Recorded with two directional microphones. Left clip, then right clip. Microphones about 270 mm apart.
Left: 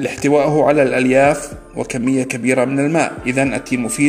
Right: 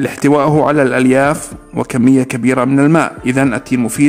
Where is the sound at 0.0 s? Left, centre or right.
Right.